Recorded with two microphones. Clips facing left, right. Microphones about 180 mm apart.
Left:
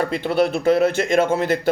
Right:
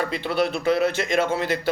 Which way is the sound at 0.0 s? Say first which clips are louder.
Left 4 dB; 50° left (ahead or behind).